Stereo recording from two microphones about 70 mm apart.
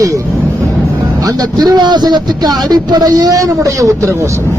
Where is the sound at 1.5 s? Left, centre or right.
Right.